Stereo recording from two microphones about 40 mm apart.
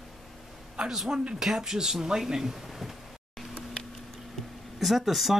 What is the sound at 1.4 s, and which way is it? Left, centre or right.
Speech, centre.